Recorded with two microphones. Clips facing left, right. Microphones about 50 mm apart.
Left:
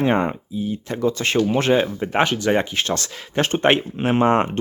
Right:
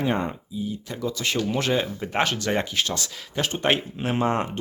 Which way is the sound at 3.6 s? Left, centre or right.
Left.